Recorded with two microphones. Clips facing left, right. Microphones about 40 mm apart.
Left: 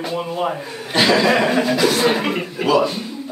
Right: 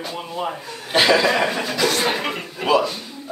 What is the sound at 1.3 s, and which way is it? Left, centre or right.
Speech, centre.